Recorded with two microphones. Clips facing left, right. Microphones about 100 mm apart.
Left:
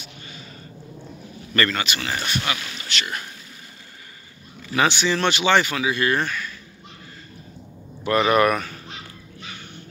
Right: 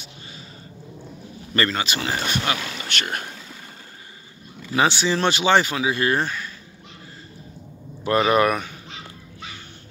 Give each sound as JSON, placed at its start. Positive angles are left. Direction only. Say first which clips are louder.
{"t": 1.5, "sound": "speech", "louder": "even", "side_deg": -25}
{"t": 2.9, "sound": "speech", "louder": "even", "side_deg": -50}
{"t": 4.7, "sound": "speech", "louder": "right 1 dB", "side_deg": -30}
{"t": 8.0, "sound": "speech", "louder": "even", "side_deg": -25}